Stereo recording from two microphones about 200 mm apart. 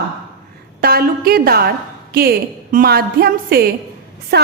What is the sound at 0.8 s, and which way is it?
A woman's voice, 50° right (ahead or behind).